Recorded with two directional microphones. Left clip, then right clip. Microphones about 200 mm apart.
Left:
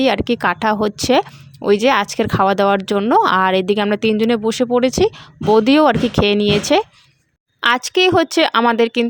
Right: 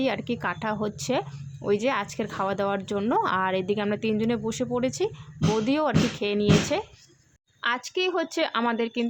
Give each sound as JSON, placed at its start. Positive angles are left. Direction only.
{"t": 0.0, "sound": "a woman's voice", "side_deg": 50}